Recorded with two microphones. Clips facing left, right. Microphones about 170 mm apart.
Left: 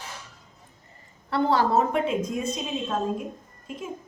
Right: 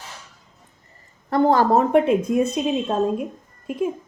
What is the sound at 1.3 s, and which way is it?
A woman's voice, 45° right (ahead or behind).